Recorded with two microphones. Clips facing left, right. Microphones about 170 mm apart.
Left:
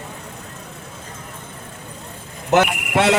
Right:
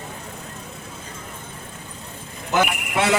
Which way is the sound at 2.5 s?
75° left (ahead or behind).